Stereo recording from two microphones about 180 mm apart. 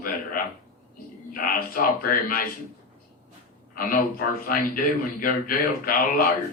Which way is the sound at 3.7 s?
55° left (ahead or behind).